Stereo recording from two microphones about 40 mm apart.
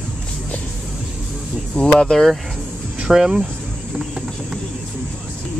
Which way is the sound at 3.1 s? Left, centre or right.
Centre.